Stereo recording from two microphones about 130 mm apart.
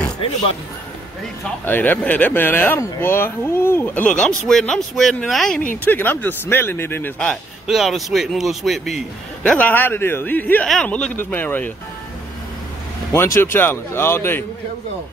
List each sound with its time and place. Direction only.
1.7 s a man's voice: 15° left (ahead or behind)
5.9 s speech: 15° left (ahead or behind)
7.6 s a man's voice: centre (ahead or behind)
9.4 s speech: 10° left (ahead or behind)
13.1 s speech: 20° left (ahead or behind)